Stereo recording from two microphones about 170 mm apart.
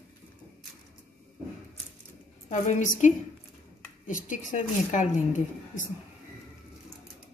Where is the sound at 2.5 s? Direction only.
45° left (ahead or behind).